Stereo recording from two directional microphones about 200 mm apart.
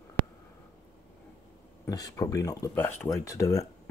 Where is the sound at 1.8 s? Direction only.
15° left (ahead or behind).